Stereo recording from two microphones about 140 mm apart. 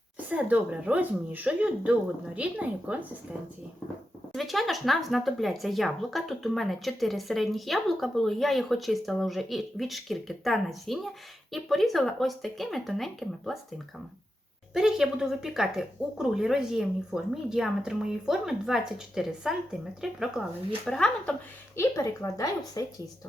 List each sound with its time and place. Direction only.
0.3 s speech: 10° right (ahead or behind)
4.3 s speech: centre (ahead or behind)
14.7 s speech: 5° right (ahead or behind)
21.8 s a woman's voice: 25° left (ahead or behind)